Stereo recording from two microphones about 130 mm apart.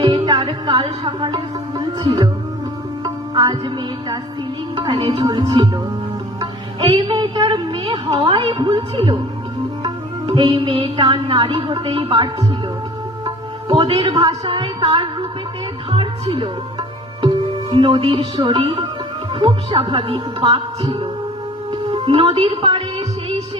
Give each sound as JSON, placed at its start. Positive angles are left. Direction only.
{"t": 0.0, "sound": "music", "side_deg": -35}
{"t": 0.8, "sound": "speech", "side_deg": -40}
{"t": 3.0, "sound": "music", "side_deg": -35}
{"t": 4.7, "sound": "music", "side_deg": -35}
{"t": 5.1, "sound": "speech", "side_deg": -40}
{"t": 6.4, "sound": "music", "side_deg": -40}
{"t": 11.6, "sound": "speech", "side_deg": -35}
{"t": 13.2, "sound": "music", "side_deg": -40}
{"t": 15.9, "sound": "speech", "side_deg": -45}
{"t": 21.9, "sound": "music", "side_deg": -45}